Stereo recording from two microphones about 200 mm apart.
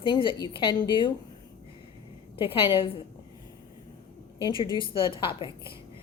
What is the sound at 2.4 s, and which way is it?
Speech, 25° left (ahead or behind).